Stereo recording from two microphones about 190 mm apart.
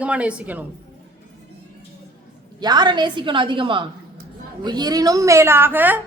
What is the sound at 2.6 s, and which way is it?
A woman's voice, 20° right (ahead or behind).